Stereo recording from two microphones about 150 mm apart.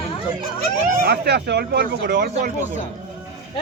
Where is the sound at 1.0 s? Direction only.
90° right.